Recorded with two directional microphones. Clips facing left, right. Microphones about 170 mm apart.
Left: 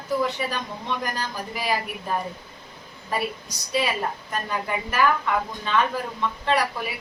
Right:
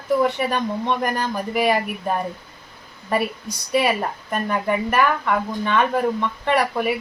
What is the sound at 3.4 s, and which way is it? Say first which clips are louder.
A woman's voice: right 6 dB; 60° right (ahead or behind).